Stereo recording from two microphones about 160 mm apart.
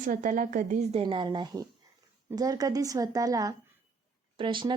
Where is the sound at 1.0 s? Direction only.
30° right (ahead or behind).